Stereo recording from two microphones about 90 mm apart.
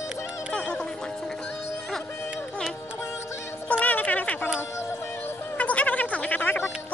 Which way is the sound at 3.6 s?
15° left (ahead or behind).